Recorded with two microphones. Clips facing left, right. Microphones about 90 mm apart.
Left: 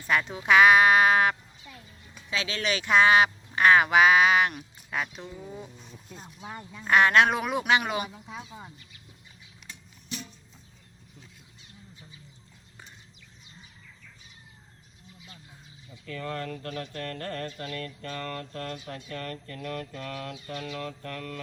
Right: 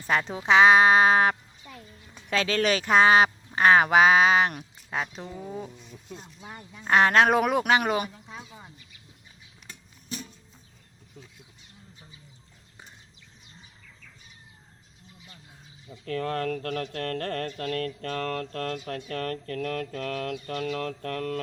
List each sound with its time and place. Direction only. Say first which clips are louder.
0.0 s speech: right 1 dB; 35° right (ahead or behind)
2.3 s speech: right 5 dB; 45° right (ahead or behind)
6.8 s speech: right 1 dB; 35° right (ahead or behind)
16.0 s a sound: right 6 dB; 60° right (ahead or behind)